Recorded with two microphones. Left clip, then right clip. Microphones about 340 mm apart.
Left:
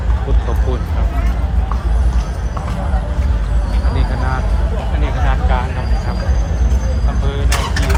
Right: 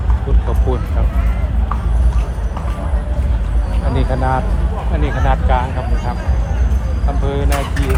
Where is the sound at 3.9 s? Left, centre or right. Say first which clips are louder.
Right 6 dB; centre.